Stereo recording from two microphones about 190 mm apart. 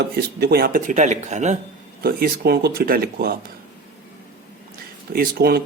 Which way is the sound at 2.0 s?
50° right (ahead or behind).